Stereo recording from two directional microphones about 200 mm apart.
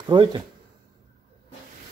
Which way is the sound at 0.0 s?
25° right (ahead or behind).